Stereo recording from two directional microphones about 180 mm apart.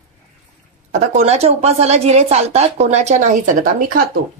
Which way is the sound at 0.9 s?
40° right (ahead or behind).